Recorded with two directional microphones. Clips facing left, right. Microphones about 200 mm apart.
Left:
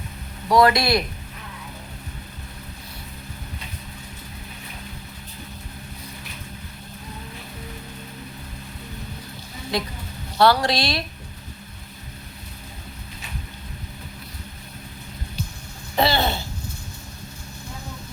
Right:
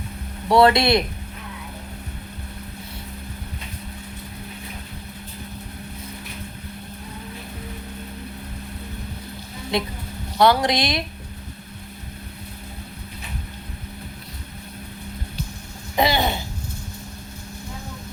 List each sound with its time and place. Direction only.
0.4 s speech: 30° right (ahead or behind)
9.7 s speech: 25° right (ahead or behind)
16.0 s a sound: 15° right (ahead or behind)